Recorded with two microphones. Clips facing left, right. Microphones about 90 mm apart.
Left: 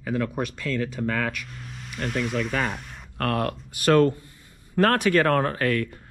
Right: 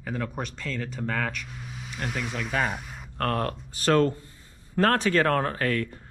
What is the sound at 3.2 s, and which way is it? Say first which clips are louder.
Speech: left 2 dB; 75° left (ahead or behind).